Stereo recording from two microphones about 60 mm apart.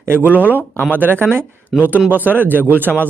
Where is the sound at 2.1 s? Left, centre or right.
Right.